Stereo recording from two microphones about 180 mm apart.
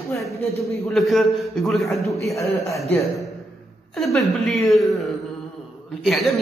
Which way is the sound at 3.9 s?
Centre (ahead or behind).